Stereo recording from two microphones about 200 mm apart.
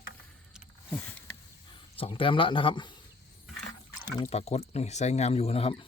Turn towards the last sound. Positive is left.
turn(degrees=30)  # may be behind; listen again after turning